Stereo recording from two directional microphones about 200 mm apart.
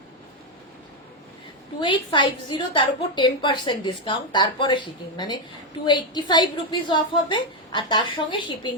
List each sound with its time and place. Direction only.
1.8 s a woman's voice: 25° left (ahead or behind)